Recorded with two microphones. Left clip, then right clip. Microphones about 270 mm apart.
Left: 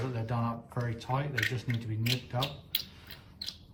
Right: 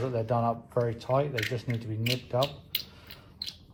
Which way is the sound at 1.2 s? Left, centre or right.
Centre.